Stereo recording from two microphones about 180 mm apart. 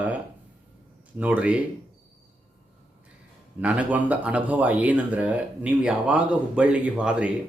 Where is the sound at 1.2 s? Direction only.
5° right (ahead or behind).